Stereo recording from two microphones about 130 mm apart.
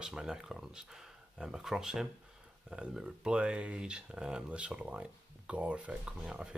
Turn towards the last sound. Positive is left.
turn(degrees=-5)  # may be behind; listen again after turning